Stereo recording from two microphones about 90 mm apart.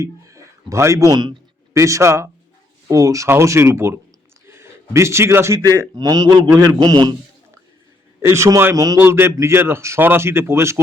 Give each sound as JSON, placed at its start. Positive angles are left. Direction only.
{"t": 0.0, "sound": "speech", "side_deg": -35}
{"t": 1.1, "sound": "a man's voice", "side_deg": -55}
{"t": 1.7, "sound": "a man's voice", "side_deg": -35}
{"t": 5.9, "sound": "a man's voice", "side_deg": -45}
{"t": 8.2, "sound": "speech", "side_deg": -30}
{"t": 8.7, "sound": "speech", "side_deg": -40}
{"t": 9.0, "sound": "speech", "side_deg": -25}